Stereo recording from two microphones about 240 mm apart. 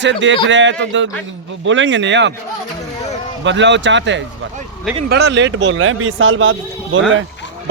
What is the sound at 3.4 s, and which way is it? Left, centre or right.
Speech, right.